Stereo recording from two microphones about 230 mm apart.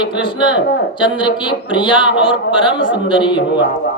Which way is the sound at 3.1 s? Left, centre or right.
Left.